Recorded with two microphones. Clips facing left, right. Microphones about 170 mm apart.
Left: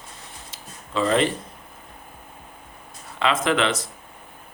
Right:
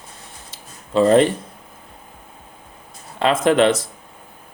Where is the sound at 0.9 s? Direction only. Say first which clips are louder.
Right 8 dB; 45° right (ahead or behind).